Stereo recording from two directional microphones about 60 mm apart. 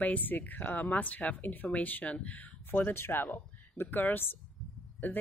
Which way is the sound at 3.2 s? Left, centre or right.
Left.